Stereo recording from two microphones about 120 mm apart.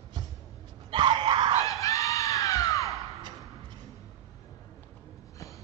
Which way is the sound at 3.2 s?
35° right (ahead or behind).